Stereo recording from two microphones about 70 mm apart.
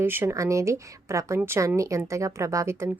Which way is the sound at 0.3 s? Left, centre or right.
Right.